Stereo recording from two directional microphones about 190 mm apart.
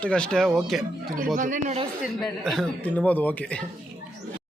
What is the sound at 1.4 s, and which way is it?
Speech, 40° right (ahead or behind).